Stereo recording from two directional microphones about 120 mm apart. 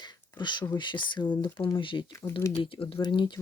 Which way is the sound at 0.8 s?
40° left (ahead or behind).